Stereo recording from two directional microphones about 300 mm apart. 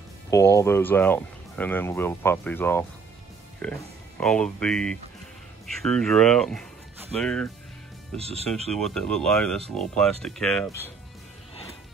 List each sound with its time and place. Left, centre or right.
0.3 s speech: centre
8.2 s speech: centre
8.6 s speech: centre